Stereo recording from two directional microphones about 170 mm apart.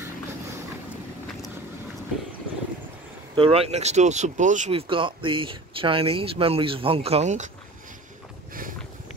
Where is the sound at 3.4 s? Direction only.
35° right (ahead or behind).